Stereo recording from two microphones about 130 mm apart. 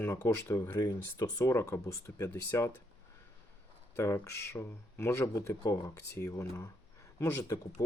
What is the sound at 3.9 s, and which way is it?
Speech, 20° left (ahead or behind).